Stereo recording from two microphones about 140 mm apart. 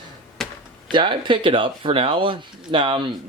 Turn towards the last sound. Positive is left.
turn(degrees=-35)  # may be behind; listen again after turning